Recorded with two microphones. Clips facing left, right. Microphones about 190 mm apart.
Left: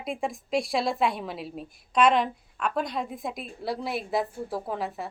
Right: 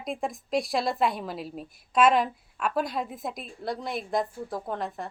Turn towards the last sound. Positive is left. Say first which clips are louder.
# left 1 dB
turn(degrees=5)  # may be behind; listen again after turning